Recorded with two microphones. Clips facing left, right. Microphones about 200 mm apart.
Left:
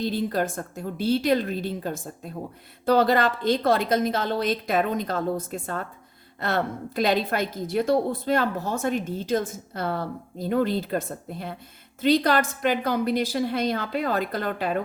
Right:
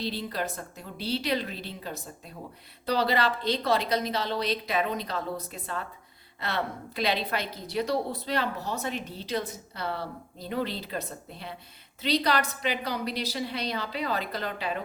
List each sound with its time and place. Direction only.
0.0 s a woman's voice: 50° left (ahead or behind)